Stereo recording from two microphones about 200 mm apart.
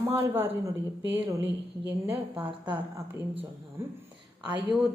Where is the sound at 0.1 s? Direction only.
10° right (ahead or behind).